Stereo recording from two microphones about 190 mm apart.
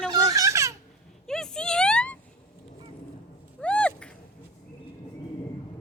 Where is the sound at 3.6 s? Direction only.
5° left (ahead or behind).